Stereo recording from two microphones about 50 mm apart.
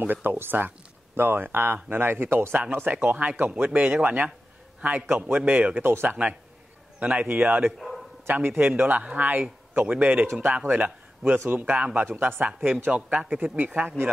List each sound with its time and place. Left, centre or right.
0.0 s speech: right
5.0 s speech: right
6.0 s a man's voice: right
8.3 s a man's voice: right
12.9 s speech: right